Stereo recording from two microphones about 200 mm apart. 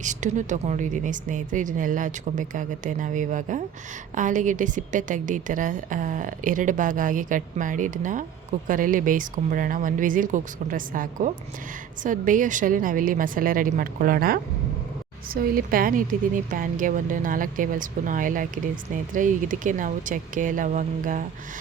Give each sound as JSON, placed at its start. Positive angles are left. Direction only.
{"t": 0.0, "sound": "a woman's voice", "side_deg": -40}